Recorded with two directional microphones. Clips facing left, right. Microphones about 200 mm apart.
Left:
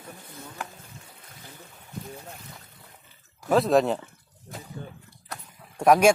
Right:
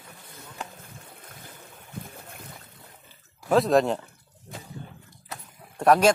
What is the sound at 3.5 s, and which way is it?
Speech, centre (ahead or behind).